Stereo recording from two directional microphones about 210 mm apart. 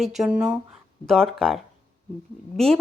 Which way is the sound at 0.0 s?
Centre (ahead or behind).